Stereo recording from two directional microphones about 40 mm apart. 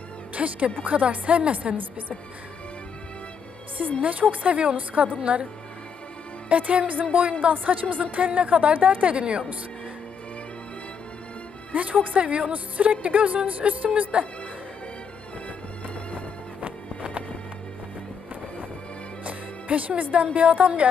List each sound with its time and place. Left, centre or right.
0.3 s a woman's voice: right
4.0 s a woman's voice: right
6.5 s a woman's voice: right
7.0 s music: right
7.4 s a woman's voice: right
11.7 s a woman's voice: right
19.2 s music: right
20.3 s a woman's voice: right